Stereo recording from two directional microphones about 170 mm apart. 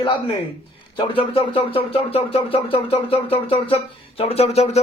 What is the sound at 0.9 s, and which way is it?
Speech, 35° left (ahead or behind).